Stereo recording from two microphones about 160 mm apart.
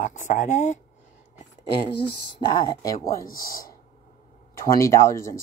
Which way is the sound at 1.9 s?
90° left.